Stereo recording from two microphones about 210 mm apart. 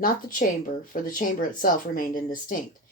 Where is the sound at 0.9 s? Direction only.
40° left (ahead or behind).